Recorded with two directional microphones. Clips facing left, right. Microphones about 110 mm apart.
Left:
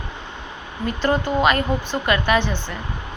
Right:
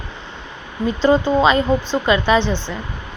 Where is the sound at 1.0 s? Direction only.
20° right (ahead or behind).